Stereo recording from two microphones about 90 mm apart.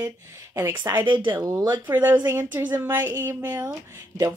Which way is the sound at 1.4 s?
40° right (ahead or behind).